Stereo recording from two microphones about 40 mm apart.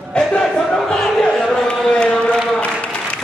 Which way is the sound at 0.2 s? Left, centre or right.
Left.